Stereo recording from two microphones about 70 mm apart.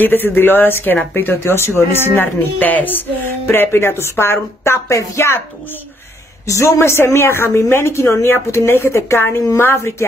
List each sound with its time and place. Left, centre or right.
0.0 s speech: left
6.4 s speech: left